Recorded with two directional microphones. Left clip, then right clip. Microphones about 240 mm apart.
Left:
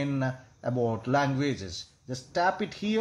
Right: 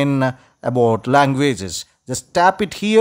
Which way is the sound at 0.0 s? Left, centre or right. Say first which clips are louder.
Right 13 dB; right.